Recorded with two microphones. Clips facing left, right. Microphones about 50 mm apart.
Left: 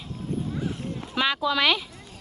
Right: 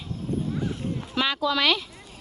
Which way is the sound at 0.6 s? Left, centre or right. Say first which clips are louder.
Right 1 dB; centre.